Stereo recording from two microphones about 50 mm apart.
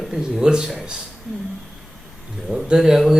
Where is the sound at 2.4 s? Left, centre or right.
Centre.